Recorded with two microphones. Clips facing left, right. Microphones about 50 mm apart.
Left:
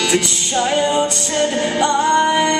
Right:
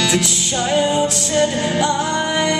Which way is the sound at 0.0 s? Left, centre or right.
Centre.